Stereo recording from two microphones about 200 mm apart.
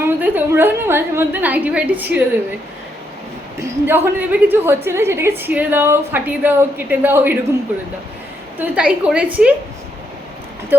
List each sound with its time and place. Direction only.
0.0 s a woman's voice: 10° right (ahead or behind)
3.8 s a woman's voice: 10° right (ahead or behind)
8.5 s a woman's voice: 5° right (ahead or behind)
10.7 s a woman's voice: 10° right (ahead or behind)